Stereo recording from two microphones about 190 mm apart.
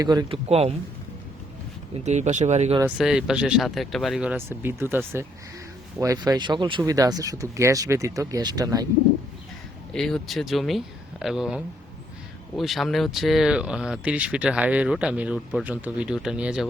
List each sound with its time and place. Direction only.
0.0 s speech: 20° right (ahead or behind)
0.4 s speech: 35° right (ahead or behind)
2.0 s speech: 35° right (ahead or behind)
3.0 s speech: 5° right (ahead or behind)
9.9 s speech: centre (ahead or behind)